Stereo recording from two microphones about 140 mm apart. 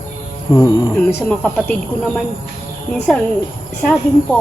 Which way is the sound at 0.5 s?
25° left (ahead or behind).